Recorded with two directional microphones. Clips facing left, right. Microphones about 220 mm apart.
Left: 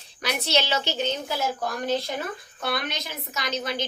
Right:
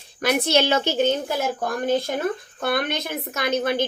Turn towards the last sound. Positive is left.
turn(degrees=-55)  # may be behind; listen again after turning